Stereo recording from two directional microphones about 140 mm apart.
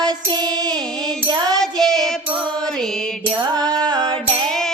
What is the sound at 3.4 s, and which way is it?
Music, 30° right (ahead or behind).